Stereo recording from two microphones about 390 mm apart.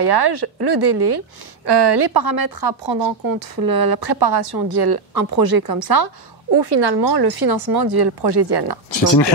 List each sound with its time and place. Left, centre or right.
0.0 s speech: right
6.6 s speech: right